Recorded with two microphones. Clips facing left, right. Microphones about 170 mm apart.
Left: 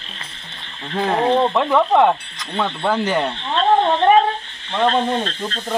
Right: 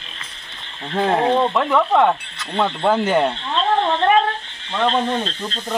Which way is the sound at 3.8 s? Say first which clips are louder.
Left 1 dB; 15° left (ahead or behind).